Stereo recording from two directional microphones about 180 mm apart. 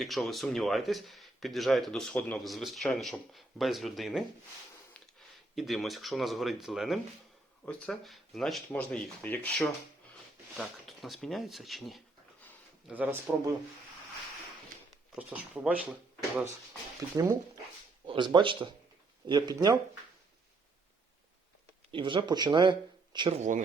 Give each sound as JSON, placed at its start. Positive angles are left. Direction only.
{"t": 0.0, "sound": "speech", "side_deg": 0}
{"t": 5.5, "sound": "speech", "side_deg": 0}
{"t": 15.1, "sound": "speech", "side_deg": -5}
{"t": 17.0, "sound": "speech", "side_deg": -15}
{"t": 21.9, "sound": "speech", "side_deg": -25}
{"t": 23.4, "sound": "speech", "side_deg": -45}